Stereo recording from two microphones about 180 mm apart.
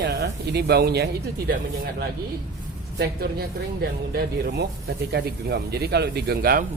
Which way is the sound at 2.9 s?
60° right (ahead or behind).